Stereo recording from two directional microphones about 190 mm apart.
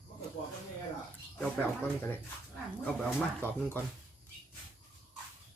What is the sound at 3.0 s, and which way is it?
Speech, centre (ahead or behind).